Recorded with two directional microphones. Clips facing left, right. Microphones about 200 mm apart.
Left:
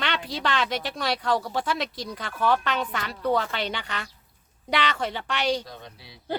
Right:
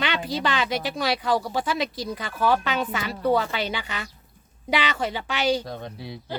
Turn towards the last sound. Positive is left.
turn(degrees=-50)  # may be behind; listen again after turning